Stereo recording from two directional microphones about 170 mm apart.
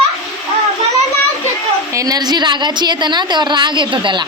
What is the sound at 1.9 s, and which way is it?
Speech, 20° right (ahead or behind).